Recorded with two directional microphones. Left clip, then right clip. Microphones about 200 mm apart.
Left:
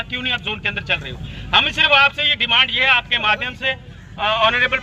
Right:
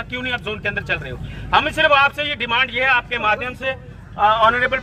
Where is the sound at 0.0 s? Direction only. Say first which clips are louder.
Left 2 dB; 50° right (ahead or behind).